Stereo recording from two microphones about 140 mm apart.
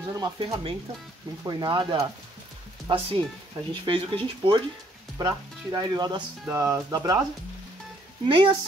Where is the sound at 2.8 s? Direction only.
40° right (ahead or behind).